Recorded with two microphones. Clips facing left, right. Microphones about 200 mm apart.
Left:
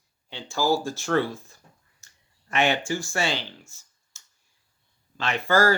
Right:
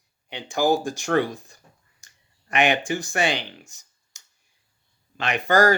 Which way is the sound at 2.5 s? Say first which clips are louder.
Right 2 dB; 15° right (ahead or behind).